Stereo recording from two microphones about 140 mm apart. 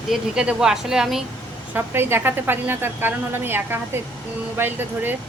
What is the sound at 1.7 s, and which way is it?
A woman's voice, 15° right (ahead or behind).